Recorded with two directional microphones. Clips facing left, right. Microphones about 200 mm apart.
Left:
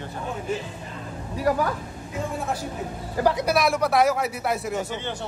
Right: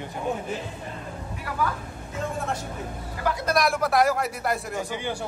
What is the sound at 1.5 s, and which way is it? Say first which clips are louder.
Speech: left 12 dB; 40° left (ahead or behind).